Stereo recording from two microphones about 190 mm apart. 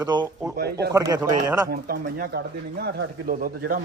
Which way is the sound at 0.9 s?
15° right (ahead or behind).